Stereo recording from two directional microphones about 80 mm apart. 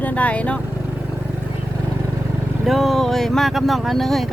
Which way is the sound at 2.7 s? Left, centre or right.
Centre.